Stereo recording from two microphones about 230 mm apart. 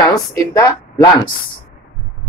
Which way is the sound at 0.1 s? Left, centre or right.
Centre.